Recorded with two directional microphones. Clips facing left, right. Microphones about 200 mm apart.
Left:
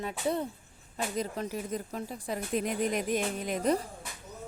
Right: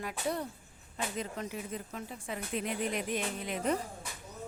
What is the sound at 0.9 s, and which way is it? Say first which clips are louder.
Speech: left 4 dB; 40° left (ahead or behind).